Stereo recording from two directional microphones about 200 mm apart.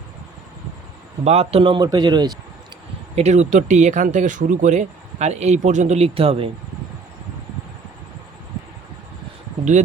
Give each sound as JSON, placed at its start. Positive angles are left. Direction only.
{"t": 1.2, "sound": "a man's voice", "side_deg": -30}
{"t": 3.2, "sound": "speech", "side_deg": -35}